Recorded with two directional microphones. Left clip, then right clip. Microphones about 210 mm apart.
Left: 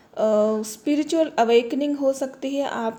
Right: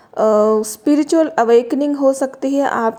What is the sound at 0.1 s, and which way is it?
A woman's voice, 30° right (ahead or behind).